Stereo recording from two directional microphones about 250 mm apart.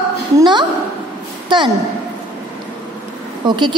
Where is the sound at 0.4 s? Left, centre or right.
Centre.